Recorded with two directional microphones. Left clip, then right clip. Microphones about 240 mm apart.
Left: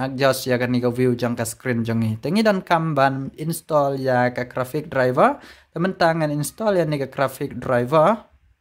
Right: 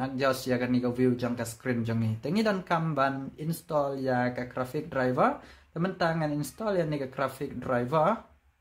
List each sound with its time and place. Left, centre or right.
0.0 s speech: left